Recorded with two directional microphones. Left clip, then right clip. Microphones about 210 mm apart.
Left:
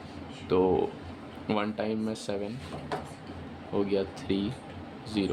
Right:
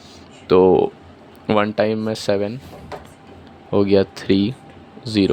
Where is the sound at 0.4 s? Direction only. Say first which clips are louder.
Right 12 dB; 35° right (ahead or behind).